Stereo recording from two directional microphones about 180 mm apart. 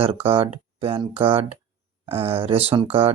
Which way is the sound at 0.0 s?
30° right (ahead or behind).